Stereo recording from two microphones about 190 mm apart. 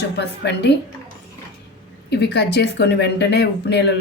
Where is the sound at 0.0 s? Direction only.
60° left (ahead or behind).